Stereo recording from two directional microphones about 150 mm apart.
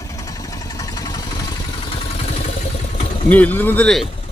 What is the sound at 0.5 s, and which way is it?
Vehicle, 25° left (ahead or behind).